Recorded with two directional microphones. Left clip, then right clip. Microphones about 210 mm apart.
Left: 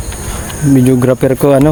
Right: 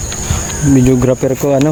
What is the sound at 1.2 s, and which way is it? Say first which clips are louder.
Speech: left 4 dB; 30° left (ahead or behind).